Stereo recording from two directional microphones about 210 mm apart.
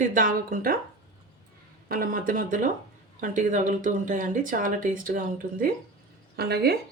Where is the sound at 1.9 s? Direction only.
40° right (ahead or behind).